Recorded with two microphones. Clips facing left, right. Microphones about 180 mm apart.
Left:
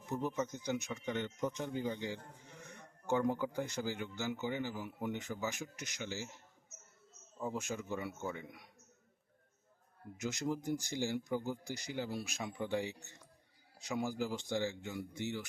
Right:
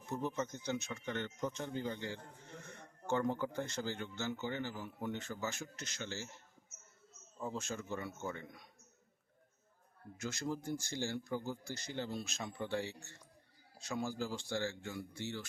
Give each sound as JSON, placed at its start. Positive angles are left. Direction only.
{"t": 0.0, "sound": "speech", "side_deg": 15}
{"t": 7.5, "sound": "speech", "side_deg": 15}
{"t": 10.2, "sound": "speech", "side_deg": 20}